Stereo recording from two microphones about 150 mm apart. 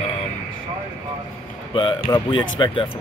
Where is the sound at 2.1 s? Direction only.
35° left (ahead or behind).